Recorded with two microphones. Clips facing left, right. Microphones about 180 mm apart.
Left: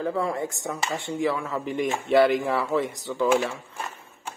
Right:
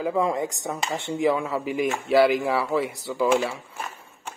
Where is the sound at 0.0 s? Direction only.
15° right (ahead or behind).